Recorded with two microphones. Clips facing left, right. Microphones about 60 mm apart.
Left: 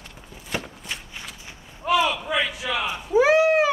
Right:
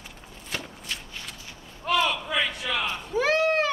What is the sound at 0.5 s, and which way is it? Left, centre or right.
Walk, centre.